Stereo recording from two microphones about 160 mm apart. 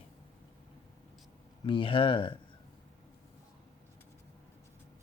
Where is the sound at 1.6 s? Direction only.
35° left (ahead or behind).